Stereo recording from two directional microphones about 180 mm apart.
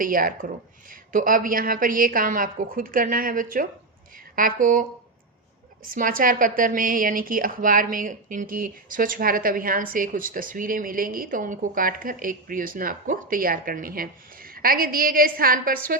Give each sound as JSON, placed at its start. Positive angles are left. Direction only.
{"t": 0.0, "sound": "a woman's voice", "side_deg": -50}
{"t": 5.9, "sound": "a woman's voice", "side_deg": -50}